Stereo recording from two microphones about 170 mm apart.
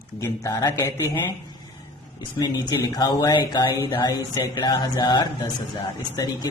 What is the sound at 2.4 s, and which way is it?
Speech, 20° left (ahead or behind).